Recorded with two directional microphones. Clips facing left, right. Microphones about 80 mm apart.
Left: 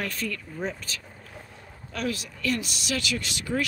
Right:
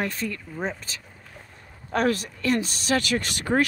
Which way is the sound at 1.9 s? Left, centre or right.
Right.